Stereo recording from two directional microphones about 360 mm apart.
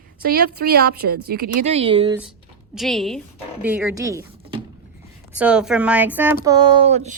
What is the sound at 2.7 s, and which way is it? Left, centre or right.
A woman's voice, centre.